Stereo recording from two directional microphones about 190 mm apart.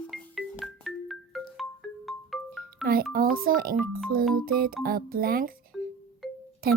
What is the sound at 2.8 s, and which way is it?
A child's voice, 50° right (ahead or behind).